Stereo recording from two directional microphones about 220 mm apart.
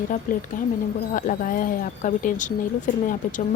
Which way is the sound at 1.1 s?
35° left (ahead or behind).